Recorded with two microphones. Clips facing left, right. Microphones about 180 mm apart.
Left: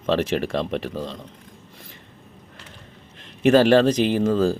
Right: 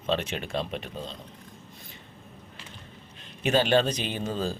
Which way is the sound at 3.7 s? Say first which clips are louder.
Left 8 dB; 90° left.